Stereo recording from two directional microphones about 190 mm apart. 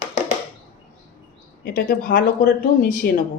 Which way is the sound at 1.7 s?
55° left (ahead or behind).